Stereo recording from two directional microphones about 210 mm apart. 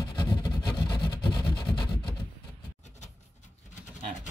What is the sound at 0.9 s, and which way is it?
Vehicle, 20° left (ahead or behind).